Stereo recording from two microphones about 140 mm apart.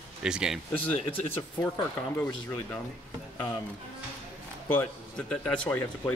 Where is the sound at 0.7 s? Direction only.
10° left (ahead or behind).